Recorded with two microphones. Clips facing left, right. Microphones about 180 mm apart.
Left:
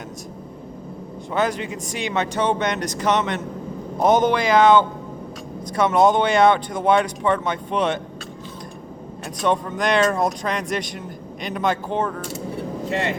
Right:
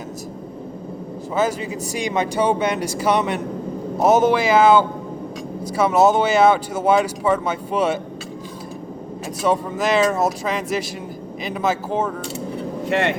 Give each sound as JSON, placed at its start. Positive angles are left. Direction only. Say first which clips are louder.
{"t": 1.3, "sound": "speech", "louder": "right 1 dB", "side_deg": -5}
{"t": 9.4, "sound": "speech", "louder": "right 1 dB", "side_deg": -5}
{"t": 12.9, "sound": "speech", "louder": "right 5 dB", "side_deg": -65}